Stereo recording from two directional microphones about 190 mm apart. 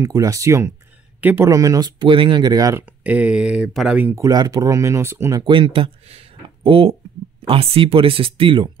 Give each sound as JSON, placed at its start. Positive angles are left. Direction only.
{"t": 0.0, "sound": "speech", "side_deg": -15}
{"t": 3.0, "sound": "speech", "side_deg": -10}